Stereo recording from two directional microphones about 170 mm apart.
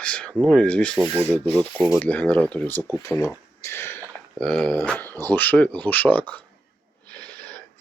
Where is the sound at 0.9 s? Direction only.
10° right (ahead or behind).